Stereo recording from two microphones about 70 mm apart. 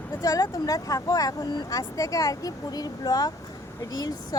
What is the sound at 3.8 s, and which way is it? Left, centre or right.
Speech, left.